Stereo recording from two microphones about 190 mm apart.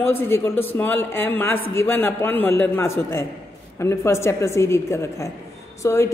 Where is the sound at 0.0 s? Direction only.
10° left (ahead or behind).